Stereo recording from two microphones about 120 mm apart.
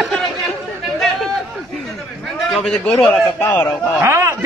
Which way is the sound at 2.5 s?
5° left (ahead or behind).